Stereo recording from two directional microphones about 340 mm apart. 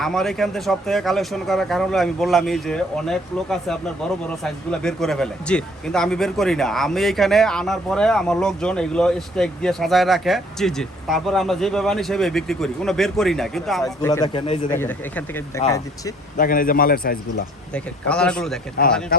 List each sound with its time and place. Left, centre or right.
0.0 s speech: centre
14.1 s speech: centre
16.4 s a man's voice: left
17.7 s speech: centre